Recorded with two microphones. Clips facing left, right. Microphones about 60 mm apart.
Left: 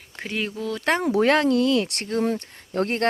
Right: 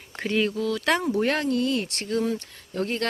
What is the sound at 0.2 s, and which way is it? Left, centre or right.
Speech, centre.